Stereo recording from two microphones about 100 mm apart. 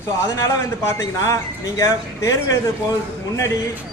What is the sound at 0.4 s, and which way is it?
A man's voice, 30° left (ahead or behind).